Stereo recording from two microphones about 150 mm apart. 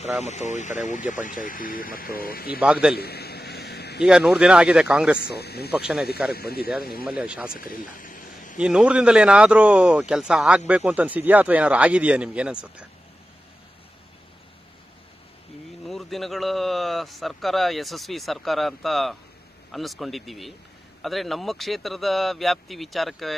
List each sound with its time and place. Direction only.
0.2 s speech: 50° left (ahead or behind); by 2.6 s 85° left
2.6 s speech: 5° right (ahead or behind)
3.0 s a sound: 90° left
4.0 s speech: 5° right (ahead or behind)
5.2 s speech: 90° left
5.7 s speech: 5° right (ahead or behind)
6.3 s speech: 90° left
7.1 s speech: 5° right (ahead or behind)
7.5 s a sound: 70° left (ahead or behind)
8.5 s speech: 5° right (ahead or behind)
15.9 s speech: centre (ahead or behind)